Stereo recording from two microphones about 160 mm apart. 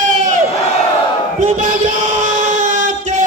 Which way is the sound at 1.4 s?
50° right (ahead or behind).